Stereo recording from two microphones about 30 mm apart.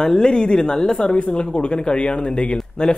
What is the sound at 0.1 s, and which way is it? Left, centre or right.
Speech, left.